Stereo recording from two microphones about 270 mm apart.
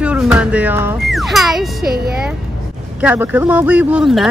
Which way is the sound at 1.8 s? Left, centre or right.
Right.